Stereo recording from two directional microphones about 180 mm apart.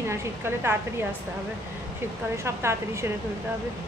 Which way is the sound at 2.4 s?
15° right (ahead or behind).